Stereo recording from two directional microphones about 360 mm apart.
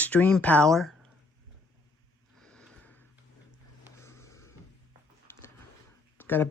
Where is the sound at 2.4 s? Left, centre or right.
Centre.